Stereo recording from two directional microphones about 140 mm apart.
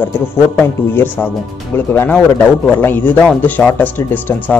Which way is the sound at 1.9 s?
15° left (ahead or behind).